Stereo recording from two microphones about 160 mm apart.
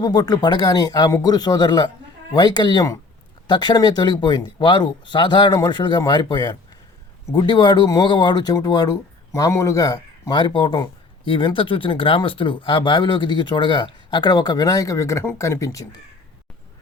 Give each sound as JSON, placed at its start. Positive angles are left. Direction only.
{"t": 0.0, "sound": "speech", "side_deg": 25}